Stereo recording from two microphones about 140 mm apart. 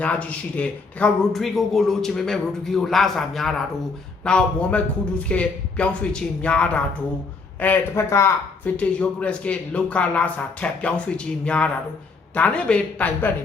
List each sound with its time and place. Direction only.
0.0 s speech: 10° left (ahead or behind)